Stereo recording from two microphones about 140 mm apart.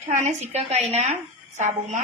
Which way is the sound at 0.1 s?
55° right (ahead or behind).